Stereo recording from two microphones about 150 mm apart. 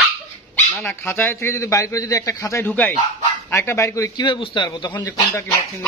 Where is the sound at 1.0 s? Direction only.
15° left (ahead or behind).